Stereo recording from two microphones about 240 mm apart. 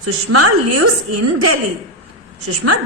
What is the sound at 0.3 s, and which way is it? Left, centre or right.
Speech, right.